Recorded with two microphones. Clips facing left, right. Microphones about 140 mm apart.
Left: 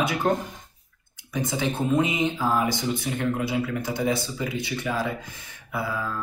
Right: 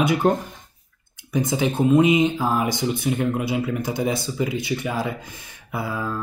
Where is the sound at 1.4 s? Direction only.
15° right (ahead or behind).